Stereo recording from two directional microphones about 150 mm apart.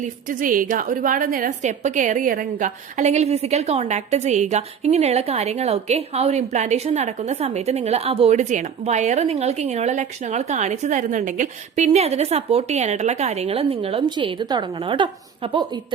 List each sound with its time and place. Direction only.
0.0 s a woman's voice: 65° right (ahead or behind); by 15.1 s 30° right (ahead or behind)